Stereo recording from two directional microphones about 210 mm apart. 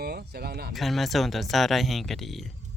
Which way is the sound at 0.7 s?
Centre (ahead or behind).